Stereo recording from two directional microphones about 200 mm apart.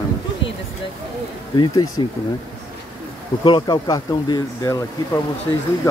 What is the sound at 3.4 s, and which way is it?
Speech, 25° left (ahead or behind).